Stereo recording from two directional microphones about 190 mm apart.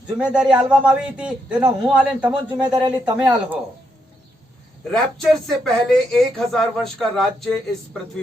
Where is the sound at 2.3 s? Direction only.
20° right (ahead or behind).